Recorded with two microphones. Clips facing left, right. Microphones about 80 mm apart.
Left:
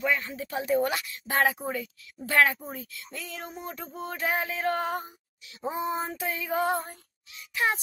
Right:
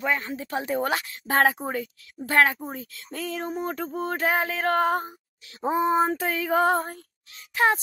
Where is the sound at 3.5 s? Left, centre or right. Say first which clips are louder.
Right 9 dB; right.